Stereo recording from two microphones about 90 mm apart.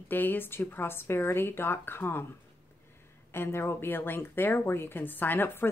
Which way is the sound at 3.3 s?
30° left (ahead or behind).